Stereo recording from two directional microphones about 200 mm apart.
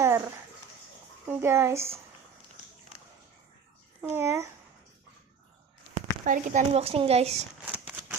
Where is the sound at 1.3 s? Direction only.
10° right (ahead or behind).